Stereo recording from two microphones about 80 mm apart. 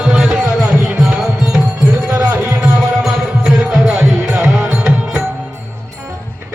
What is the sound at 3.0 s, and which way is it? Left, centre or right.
Music, centre.